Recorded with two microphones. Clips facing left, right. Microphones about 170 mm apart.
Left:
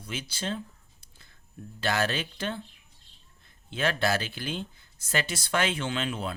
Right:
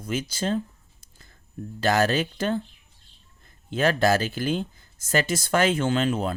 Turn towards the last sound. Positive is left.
turn(degrees=-45)  # may be behind; listen again after turning